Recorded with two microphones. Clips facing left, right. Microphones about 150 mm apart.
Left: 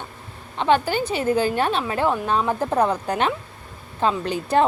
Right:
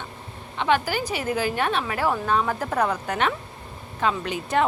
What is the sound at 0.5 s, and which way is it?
A woman's voice, 35° left (ahead or behind).